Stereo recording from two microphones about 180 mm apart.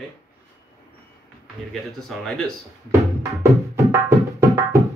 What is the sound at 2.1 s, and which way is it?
Speech, centre (ahead or behind).